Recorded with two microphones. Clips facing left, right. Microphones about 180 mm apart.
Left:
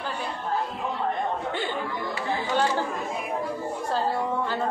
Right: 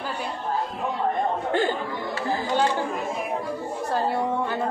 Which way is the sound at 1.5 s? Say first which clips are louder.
Right 7 dB; 45° right (ahead or behind).